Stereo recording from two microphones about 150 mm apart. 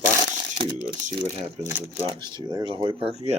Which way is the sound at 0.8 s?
55° right (ahead or behind).